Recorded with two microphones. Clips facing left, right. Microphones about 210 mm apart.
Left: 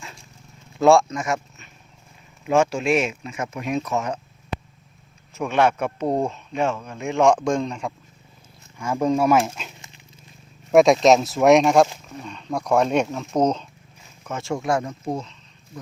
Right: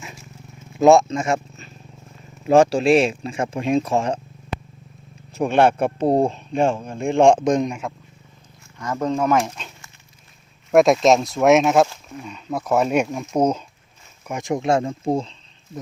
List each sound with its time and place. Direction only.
0.8 s speech: 20° right (ahead or behind)
5.3 s speech: 30° right (ahead or behind); by 7.8 s 15° right (ahead or behind)
8.8 s speech: 10° left (ahead or behind)
10.7 s speech: centre (ahead or behind); by 15.8 s 30° right (ahead or behind)